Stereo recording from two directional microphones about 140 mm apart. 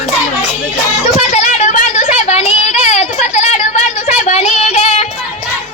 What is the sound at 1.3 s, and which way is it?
Child singing, 55° left (ahead or behind).